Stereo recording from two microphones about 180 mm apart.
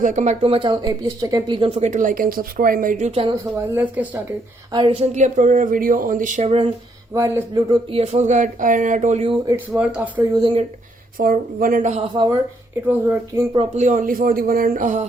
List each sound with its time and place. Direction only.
0.0 s speech: 45° right (ahead or behind)
3.1 s speech: 30° right (ahead or behind)
3.7 s speech: 10° right (ahead or behind)
4.7 s speech: 30° right (ahead or behind)
5.1 s speech: 45° right (ahead or behind)
7.1 s speech: 15° right (ahead or behind)
7.9 s speech: 35° right (ahead or behind)
9.7 s speech: 5° right (ahead or behind)
10.3 s speech: 30° right (ahead or behind)
11.2 s speech: 50° right (ahead or behind)
12.1 s speech: 25° right (ahead or behind)
12.9 s speech: 15° right (ahead or behind)
13.6 s speech: 40° right (ahead or behind)